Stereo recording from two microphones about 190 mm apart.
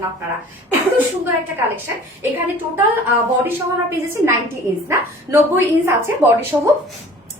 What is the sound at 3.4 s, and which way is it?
A woman's voice, 10° right (ahead or behind).